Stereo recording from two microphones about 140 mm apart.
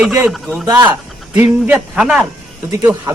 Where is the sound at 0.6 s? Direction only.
30° right (ahead or behind).